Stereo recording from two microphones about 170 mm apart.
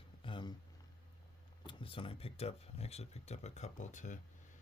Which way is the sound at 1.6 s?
30° left (ahead or behind).